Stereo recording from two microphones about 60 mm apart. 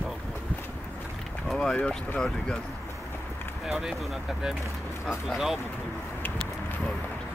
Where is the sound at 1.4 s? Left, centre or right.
Centre.